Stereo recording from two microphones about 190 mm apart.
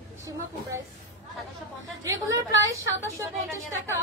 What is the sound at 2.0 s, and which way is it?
A woman's voice, 15° right (ahead or behind).